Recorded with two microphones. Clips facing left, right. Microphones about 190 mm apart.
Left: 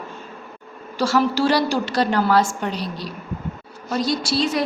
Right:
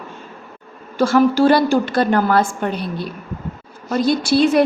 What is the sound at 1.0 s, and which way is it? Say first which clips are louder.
A woman's voice: right 5 dB; 50° right (ahead or behind).